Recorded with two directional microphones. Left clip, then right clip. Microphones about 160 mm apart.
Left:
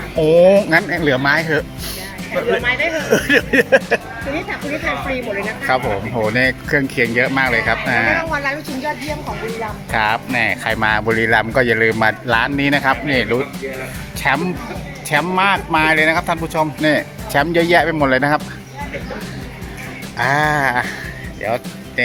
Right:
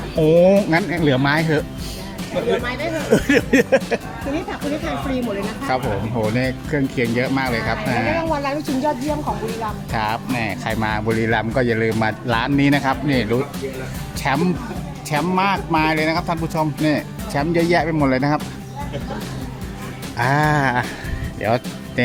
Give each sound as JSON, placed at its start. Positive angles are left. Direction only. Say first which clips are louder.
{"t": 0.2, "sound": "speech", "louder": "left 3 dB", "side_deg": -10}
{"t": 0.9, "sound": "speech", "louder": "left 3 dB", "side_deg": -10}
{"t": 3.1, "sound": "speech", "louder": "left 1 dB", "side_deg": -10}
{"t": 5.4, "sound": "speech", "louder": "left 4 dB", "side_deg": 0}
{"t": 8.3, "sound": "a woman's voice", "louder": "left 2 dB", "side_deg": -90}
{"t": 9.9, "sound": "speech", "louder": "left 7 dB", "side_deg": -5}
{"t": 20.1, "sound": "speech", "louder": "left 2 dB", "side_deg": -15}